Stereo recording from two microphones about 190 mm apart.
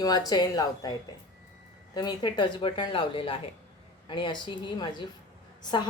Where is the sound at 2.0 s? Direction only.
20° left (ahead or behind).